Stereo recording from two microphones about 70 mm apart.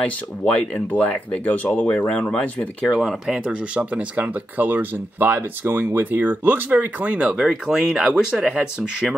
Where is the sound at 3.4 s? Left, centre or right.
Centre.